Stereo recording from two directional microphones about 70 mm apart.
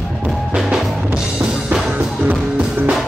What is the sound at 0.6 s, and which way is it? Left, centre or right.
Music, centre.